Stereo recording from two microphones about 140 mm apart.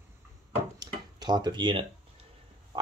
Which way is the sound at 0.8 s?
30° right (ahead or behind).